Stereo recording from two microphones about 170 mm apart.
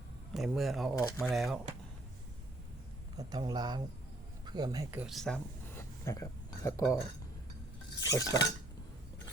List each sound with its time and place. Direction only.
0.3 s speech: centre (ahead or behind)
3.2 s speech: 25° right (ahead or behind)
5.1 s speech: 5° left (ahead or behind)
6.1 s speech: 20° left (ahead or behind)
8.1 s cutlery: 20° left (ahead or behind)